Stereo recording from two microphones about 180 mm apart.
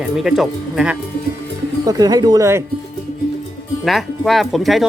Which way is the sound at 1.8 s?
20° right (ahead or behind).